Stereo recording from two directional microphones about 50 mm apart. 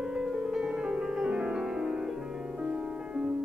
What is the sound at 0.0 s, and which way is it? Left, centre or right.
Music, centre.